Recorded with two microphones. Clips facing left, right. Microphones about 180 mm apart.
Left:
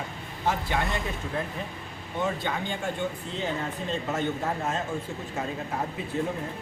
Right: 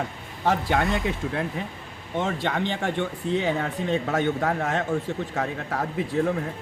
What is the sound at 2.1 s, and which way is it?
Speech, 85° right.